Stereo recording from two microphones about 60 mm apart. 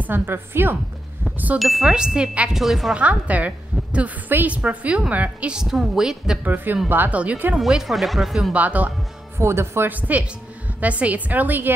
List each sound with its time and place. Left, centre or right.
0.0 s a woman's voice: right
1.6 s speech: centre
2.5 s speech: centre
2.9 s a woman's voice: right
5.6 s speech: centre
6.4 s a woman's voice: right
7.5 s speech: centre
8.5 s a woman's voice: right
9.4 s speech: right
9.8 s a woman's voice: right